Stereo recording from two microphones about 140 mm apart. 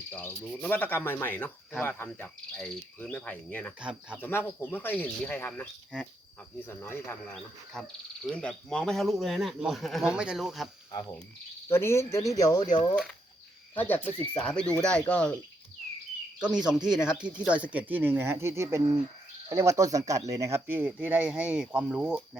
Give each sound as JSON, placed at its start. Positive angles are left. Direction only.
{"t": 0.1, "sound": "cricket", "side_deg": 10}
{"t": 3.8, "sound": "speech", "side_deg": -10}
{"t": 4.2, "sound": "cricket", "side_deg": 15}
{"t": 7.7, "sound": "speech", "side_deg": 5}
{"t": 11.7, "sound": "speech", "side_deg": 15}
{"t": 13.7, "sound": "cricket", "side_deg": 10}
{"t": 16.4, "sound": "speech", "side_deg": -5}